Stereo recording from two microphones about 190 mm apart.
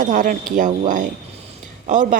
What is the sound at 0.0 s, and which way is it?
A woman's voice, 40° right (ahead or behind).